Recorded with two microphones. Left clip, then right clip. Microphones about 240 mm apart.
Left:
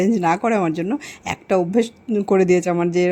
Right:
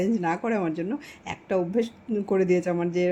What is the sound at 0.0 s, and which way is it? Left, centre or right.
Speech, left.